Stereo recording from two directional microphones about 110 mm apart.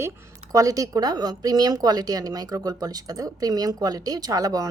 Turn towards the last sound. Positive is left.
turn(degrees=-35)  # may be behind; listen again after turning